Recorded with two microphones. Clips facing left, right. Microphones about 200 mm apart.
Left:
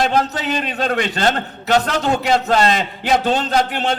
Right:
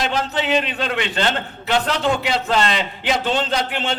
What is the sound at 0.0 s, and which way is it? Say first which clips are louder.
A man's voice: left 4 dB; 45° left (ahead or behind).